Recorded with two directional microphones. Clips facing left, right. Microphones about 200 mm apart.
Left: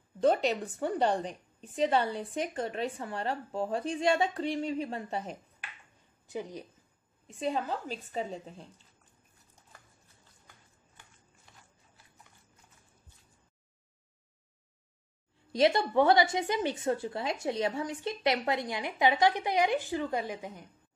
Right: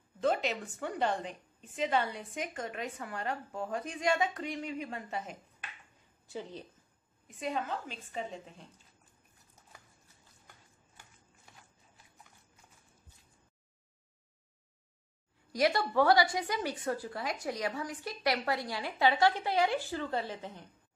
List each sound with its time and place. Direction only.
0.2 s a woman's voice: 35° left (ahead or behind)
6.2 s a woman's voice: 15° left (ahead or behind)
7.2 s a woman's voice: 30° left (ahead or behind)
15.5 s a woman's voice: 25° left (ahead or behind)